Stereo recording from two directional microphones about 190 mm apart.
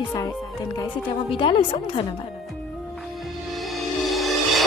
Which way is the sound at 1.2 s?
25° left (ahead or behind).